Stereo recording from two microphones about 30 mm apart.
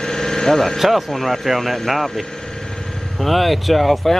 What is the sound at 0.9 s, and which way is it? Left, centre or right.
Speech, centre.